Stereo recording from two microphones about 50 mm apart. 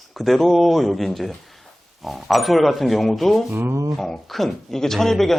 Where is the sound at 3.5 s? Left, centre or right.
Right.